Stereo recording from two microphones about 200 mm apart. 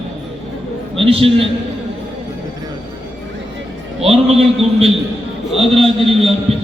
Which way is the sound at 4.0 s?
30° right (ahead or behind).